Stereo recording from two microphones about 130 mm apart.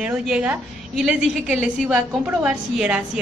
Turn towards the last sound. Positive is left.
turn(degrees=-5)  # may be behind; listen again after turning